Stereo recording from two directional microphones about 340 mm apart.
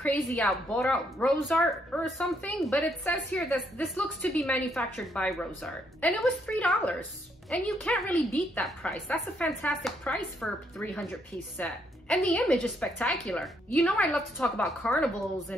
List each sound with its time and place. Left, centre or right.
0.0 s speech: centre